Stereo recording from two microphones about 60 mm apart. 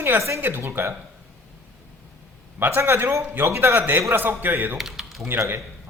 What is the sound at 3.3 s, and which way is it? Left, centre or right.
A man's voice, right.